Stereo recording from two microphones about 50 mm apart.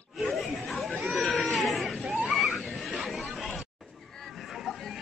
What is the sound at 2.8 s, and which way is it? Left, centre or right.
Chatter, centre.